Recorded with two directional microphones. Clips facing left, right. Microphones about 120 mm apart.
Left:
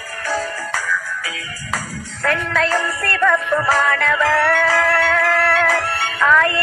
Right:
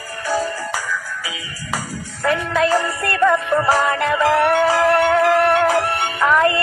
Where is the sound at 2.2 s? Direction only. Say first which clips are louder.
Right 2 dB; 15° right (ahead or behind).